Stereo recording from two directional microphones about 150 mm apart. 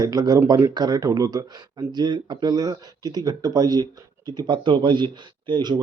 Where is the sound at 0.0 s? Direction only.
25° right (ahead or behind).